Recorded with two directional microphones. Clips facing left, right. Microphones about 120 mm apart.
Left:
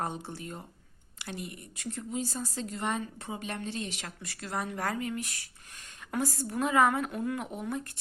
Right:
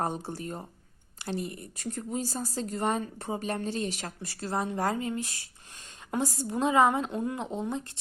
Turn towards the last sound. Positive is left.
turn(degrees=-25)  # may be behind; listen again after turning